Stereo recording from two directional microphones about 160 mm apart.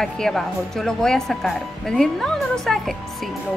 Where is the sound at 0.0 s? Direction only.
5° left (ahead or behind).